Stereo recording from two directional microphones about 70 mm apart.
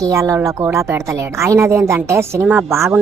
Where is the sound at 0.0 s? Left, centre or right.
Right.